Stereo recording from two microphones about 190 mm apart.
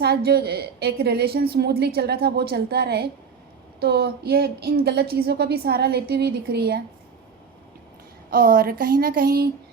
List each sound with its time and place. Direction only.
0.0 s a woman's voice: 55° right (ahead or behind)
8.3 s speech: 50° right (ahead or behind)